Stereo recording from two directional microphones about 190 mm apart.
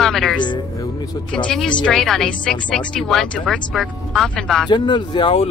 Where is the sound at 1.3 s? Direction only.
5° left (ahead or behind).